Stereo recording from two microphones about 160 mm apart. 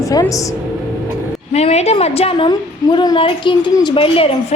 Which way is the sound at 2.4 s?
30° left (ahead or behind).